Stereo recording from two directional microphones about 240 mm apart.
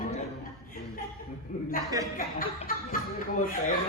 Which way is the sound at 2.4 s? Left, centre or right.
Left.